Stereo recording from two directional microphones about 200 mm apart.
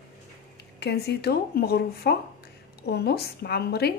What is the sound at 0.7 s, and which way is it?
Speech, 55° left (ahead or behind).